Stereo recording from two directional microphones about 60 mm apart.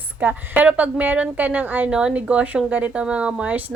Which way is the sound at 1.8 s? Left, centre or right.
Centre.